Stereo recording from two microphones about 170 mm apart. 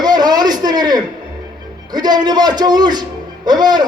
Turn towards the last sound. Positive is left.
turn(degrees=-25)  # may be behind; listen again after turning